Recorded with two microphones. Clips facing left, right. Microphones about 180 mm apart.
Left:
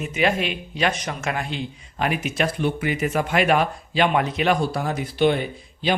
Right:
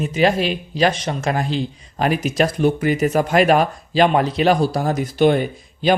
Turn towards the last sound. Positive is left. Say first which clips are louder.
# right 6 dB
turn(degrees=-45)  # may be behind; listen again after turning